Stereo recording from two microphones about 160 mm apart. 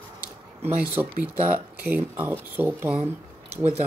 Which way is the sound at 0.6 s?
15° right (ahead or behind).